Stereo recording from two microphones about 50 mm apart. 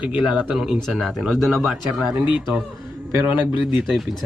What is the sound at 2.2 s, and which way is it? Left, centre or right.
A man's voice, right.